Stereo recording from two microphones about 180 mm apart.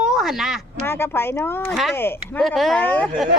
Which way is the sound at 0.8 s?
10° left (ahead or behind).